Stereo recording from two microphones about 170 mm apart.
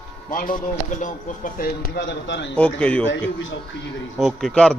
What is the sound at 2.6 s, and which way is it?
Speech, 5° left (ahead or behind).